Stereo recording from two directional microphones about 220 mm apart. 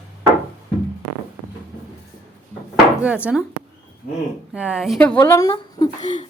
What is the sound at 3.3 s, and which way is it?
Speech, 5° right (ahead or behind).